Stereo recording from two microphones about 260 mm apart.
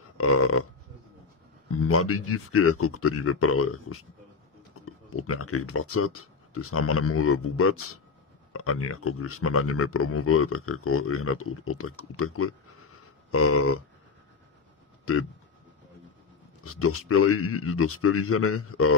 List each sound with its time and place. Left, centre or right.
0.2 s speech: left
1.7 s speech: left
15.1 s speech: left
16.6 s speech: left